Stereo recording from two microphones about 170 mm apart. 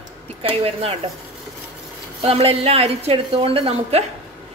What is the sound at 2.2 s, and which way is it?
A woman's voice, 35° right (ahead or behind).